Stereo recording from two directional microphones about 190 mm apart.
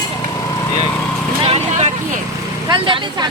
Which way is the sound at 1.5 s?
35° right (ahead or behind).